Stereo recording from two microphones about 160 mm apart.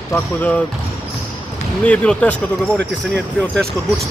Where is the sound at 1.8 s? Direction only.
10° left (ahead or behind).